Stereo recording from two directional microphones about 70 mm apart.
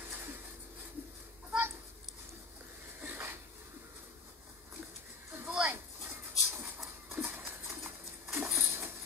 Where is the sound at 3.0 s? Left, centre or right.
Right.